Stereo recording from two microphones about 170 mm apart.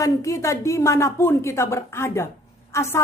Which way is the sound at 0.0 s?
20° left (ahead or behind).